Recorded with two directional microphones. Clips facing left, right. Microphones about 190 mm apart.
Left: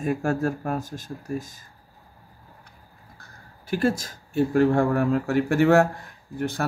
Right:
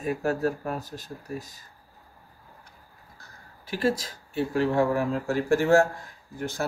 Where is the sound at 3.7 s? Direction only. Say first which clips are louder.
Left 2 dB; 50° left (ahead or behind).